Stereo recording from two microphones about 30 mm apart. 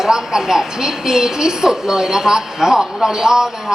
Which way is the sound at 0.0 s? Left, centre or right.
Centre.